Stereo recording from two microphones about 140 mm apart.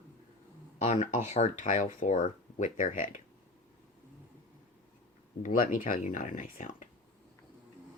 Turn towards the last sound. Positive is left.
turn(degrees=70)  # may be behind; listen again after turning